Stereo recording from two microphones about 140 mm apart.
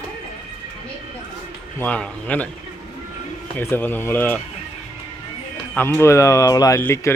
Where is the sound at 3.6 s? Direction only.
15° left (ahead or behind).